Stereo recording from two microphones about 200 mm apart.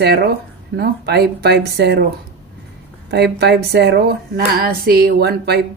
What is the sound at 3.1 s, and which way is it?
A woman's voice, 55° right (ahead or behind).